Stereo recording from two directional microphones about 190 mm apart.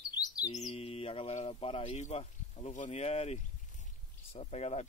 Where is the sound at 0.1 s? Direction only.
20° left (ahead or behind).